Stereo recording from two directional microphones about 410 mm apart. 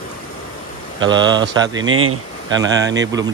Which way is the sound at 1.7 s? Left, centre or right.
Right.